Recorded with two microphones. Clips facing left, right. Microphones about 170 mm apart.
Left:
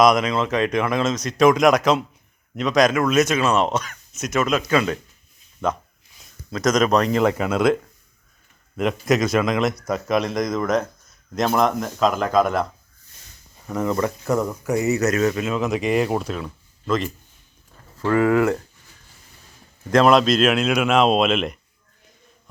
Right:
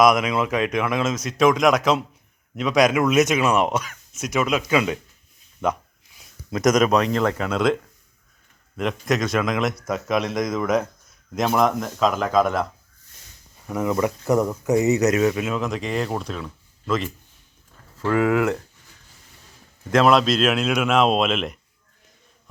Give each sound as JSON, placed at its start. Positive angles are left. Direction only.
{"t": 0.0, "sound": "speech", "side_deg": -5}
{"t": 6.1, "sound": "a sound", "side_deg": -20}
{"t": 7.1, "sound": "speech", "side_deg": 10}
{"t": 13.7, "sound": "speech", "side_deg": -5}
{"t": 19.9, "sound": "speech", "side_deg": 0}